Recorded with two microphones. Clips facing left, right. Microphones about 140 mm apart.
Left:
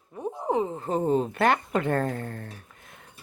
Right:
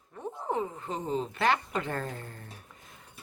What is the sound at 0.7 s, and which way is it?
Speech, 45° left (ahead or behind).